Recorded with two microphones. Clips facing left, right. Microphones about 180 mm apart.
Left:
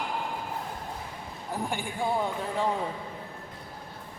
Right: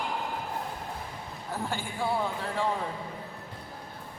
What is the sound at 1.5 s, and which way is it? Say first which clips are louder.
Speech: left 2 dB; 15° left (ahead or behind).